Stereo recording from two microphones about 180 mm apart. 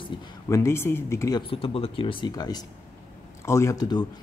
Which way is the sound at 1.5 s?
30° left (ahead or behind).